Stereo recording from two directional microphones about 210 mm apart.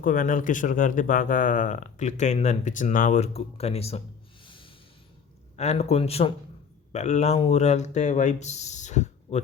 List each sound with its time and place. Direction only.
0.0 s speech: 40° left (ahead or behind)
4.4 s snort: 25° left (ahead or behind)
5.5 s speech: 30° left (ahead or behind)